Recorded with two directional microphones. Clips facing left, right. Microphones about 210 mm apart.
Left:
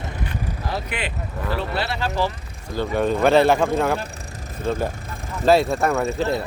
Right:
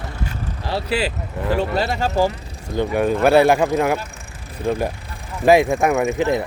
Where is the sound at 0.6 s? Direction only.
30° right (ahead or behind).